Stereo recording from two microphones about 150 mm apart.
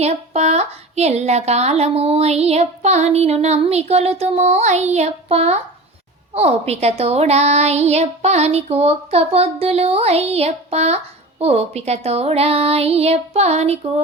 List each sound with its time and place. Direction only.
0.0 s speech: 45° right (ahead or behind)